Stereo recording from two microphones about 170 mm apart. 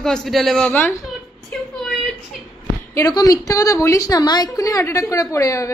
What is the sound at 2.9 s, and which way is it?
A woman's voice, 20° left (ahead or behind).